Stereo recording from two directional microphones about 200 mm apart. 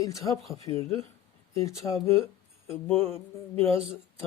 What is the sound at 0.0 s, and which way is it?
Speech, 15° left (ahead or behind).